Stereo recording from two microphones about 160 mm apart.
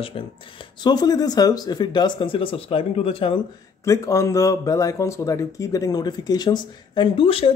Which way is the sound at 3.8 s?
20° left (ahead or behind).